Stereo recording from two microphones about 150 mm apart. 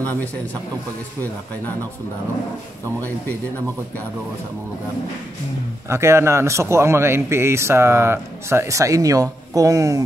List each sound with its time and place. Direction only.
5.9 s a man's voice: 20° right (ahead or behind)